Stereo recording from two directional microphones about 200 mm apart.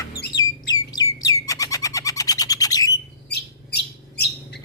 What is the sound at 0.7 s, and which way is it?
Bird, 20° left (ahead or behind).